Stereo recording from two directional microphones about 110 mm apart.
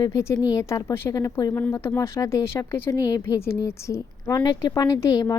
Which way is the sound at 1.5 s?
20° left (ahead or behind).